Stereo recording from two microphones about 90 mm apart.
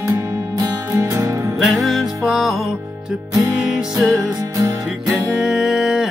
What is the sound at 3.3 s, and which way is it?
Music, 40° right (ahead or behind).